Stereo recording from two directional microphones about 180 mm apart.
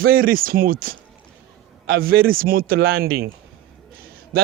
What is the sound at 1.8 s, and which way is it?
Speech, 75° right (ahead or behind).